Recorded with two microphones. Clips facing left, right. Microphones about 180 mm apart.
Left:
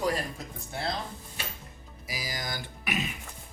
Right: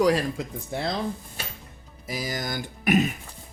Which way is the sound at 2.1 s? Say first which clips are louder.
Right 6 dB; 50° right (ahead or behind).